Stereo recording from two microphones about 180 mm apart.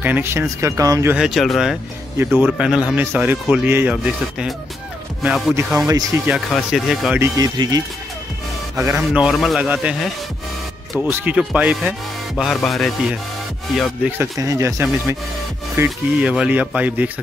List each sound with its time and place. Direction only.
0.0 s speech: 10° right (ahead or behind)
1.1 s a man's voice: centre (ahead or behind)
5.9 s speech: 15° right (ahead or behind)
6.3 s a man's voice: centre (ahead or behind)
7.2 s a man's voice: 20° right (ahead or behind)
11.1 s a man's voice: 10° right (ahead or behind)
14.1 s speech: 15° right (ahead or behind)